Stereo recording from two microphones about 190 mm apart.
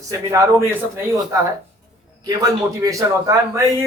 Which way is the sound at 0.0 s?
15° right (ahead or behind).